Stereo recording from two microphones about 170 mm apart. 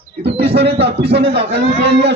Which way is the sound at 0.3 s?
75° right (ahead or behind).